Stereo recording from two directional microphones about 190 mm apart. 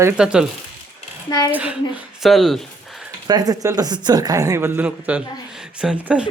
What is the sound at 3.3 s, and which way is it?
Speech, 20° right (ahead or behind).